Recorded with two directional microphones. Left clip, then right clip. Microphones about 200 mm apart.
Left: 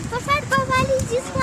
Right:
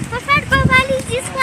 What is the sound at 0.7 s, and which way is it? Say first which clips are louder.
Speech: right 5 dB; 20° left (ahead or behind).